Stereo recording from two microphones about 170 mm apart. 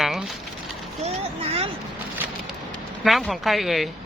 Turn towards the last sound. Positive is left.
turn(degrees=0)  # may be behind; listen again after turning